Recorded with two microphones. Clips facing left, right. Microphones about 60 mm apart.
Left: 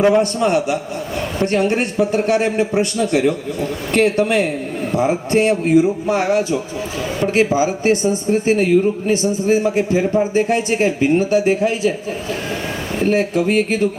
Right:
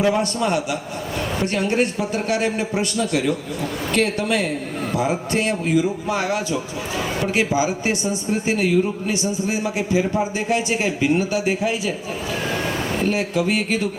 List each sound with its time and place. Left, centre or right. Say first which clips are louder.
0.0 s a man's voice: left 5 dB; left
13.1 s a man's voice: left 6 dB; left